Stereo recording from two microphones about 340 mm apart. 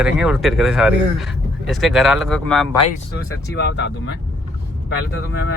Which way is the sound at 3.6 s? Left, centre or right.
Left.